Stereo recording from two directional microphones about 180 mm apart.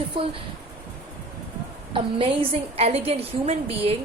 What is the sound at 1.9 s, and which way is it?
A woman's voice, 30° right (ahead or behind).